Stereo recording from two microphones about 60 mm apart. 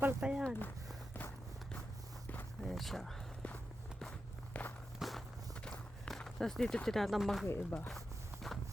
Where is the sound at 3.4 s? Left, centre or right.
Centre.